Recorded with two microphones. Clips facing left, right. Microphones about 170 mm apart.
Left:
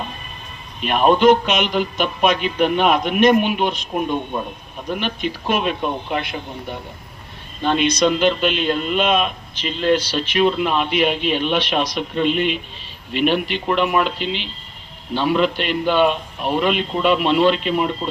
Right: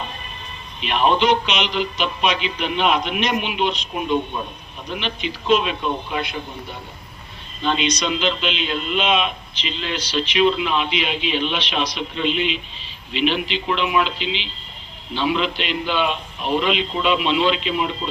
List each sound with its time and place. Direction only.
0.8 s a man's voice: 45° left (ahead or behind)